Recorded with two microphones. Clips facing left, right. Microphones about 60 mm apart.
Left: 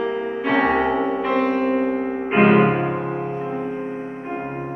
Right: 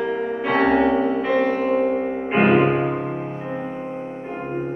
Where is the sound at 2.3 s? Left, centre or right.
Centre.